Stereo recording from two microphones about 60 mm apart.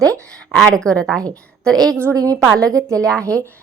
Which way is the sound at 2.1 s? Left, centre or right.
Right.